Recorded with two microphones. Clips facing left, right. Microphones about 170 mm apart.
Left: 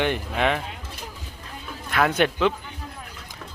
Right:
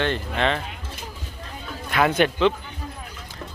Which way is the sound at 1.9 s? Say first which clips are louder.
Right 1 dB; centre (ahead or behind).